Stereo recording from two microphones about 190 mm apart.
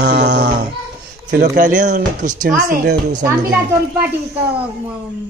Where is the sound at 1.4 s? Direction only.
45° right (ahead or behind).